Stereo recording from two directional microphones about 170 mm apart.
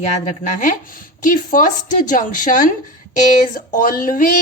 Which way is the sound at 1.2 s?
50° left (ahead or behind).